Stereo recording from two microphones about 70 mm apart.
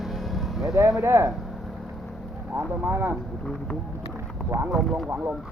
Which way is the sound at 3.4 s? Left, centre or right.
Centre.